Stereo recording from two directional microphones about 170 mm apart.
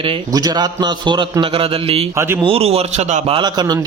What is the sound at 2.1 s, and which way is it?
Speech, 15° right (ahead or behind).